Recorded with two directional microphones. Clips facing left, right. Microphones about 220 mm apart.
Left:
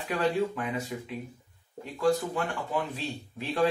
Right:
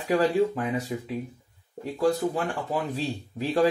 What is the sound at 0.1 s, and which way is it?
Speech, 40° right (ahead or behind).